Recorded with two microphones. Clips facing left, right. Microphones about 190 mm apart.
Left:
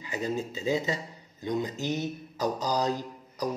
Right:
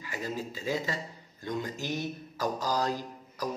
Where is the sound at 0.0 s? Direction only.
20° left (ahead or behind).